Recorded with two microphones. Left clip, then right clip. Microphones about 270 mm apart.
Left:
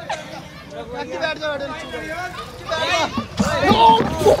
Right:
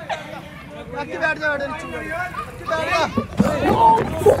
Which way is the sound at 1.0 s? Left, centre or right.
Right.